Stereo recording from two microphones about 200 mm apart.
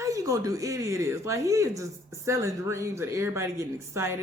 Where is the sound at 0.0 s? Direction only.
15° right (ahead or behind).